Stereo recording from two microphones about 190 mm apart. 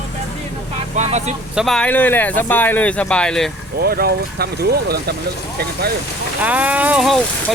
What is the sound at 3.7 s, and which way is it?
Speech, 50° right (ahead or behind).